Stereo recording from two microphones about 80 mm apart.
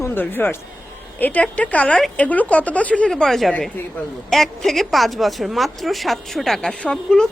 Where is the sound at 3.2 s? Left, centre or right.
Centre.